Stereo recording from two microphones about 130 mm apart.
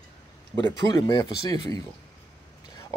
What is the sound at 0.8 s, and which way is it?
Speech, 30° left (ahead or behind).